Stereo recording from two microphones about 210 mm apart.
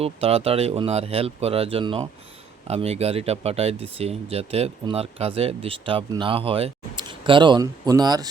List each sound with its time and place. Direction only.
0.0 s speech: 30° right (ahead or behind)